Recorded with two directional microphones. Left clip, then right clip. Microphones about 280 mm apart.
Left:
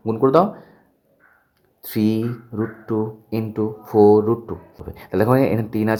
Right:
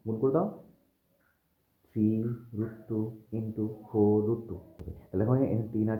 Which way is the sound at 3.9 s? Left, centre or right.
Left.